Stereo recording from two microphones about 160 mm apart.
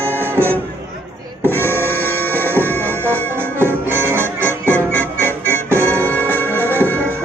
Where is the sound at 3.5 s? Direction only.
15° right (ahead or behind).